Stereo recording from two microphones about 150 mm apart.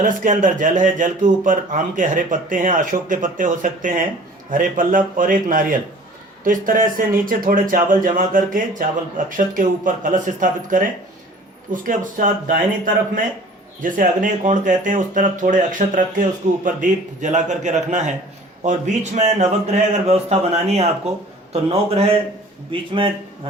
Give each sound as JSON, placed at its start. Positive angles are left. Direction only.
{"t": 0.0, "sound": "a man's voice", "side_deg": -60}